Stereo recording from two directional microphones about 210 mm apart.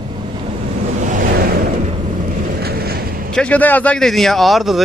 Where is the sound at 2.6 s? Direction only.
45° right (ahead or behind).